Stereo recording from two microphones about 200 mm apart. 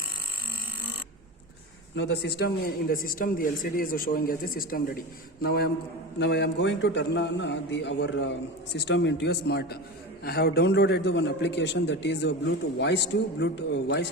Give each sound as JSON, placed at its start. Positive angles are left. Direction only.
{"t": 2.0, "sound": "a man's voice", "side_deg": 55}